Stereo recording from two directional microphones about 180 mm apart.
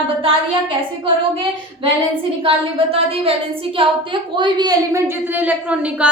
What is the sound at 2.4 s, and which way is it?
A woman's voice, 30° right (ahead or behind).